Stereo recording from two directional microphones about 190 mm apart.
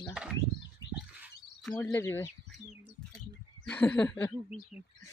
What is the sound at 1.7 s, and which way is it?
Speech, 15° left (ahead or behind).